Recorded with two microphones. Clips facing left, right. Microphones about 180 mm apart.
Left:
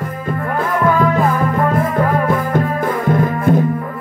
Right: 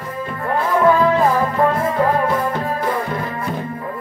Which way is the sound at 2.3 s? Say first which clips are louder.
Left 3 dB; 50° left (ahead or behind).